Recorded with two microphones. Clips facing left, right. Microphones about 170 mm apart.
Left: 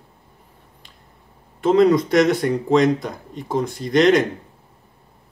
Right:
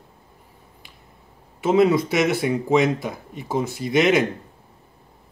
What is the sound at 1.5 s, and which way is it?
Speech, 5° right (ahead or behind).